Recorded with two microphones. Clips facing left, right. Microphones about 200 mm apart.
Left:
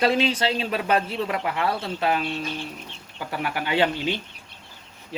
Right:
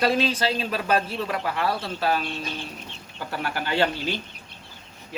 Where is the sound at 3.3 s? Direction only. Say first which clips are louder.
Left 2 dB; 15° left (ahead or behind).